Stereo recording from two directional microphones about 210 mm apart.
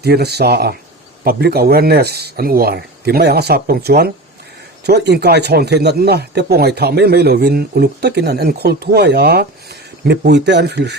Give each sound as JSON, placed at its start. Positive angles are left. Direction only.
{"t": 0.0, "sound": "speech", "side_deg": -50}